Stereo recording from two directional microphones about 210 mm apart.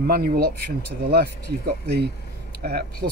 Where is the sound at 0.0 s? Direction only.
45° right (ahead or behind).